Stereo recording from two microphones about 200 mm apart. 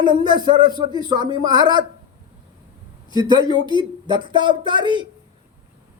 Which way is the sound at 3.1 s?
20° right (ahead or behind).